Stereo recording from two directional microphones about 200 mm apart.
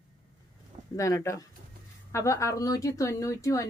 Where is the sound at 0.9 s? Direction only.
15° left (ahead or behind).